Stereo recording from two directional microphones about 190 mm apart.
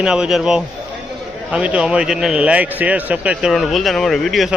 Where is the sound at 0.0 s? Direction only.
5° right (ahead or behind).